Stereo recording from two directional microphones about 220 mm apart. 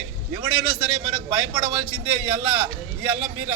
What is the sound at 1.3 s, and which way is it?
A man's voice, 10° right (ahead or behind).